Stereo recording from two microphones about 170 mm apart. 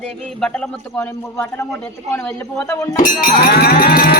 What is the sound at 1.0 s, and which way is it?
A man's voice, 15° left (ahead or behind).